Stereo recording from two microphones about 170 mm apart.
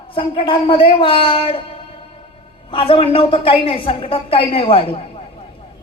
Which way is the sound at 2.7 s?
30° left (ahead or behind).